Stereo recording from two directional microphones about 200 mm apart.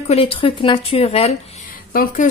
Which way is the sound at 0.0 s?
30° left (ahead or behind).